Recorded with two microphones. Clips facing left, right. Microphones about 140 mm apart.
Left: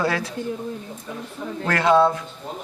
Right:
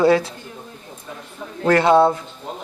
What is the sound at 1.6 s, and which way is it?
Speech, 30° right (ahead or behind).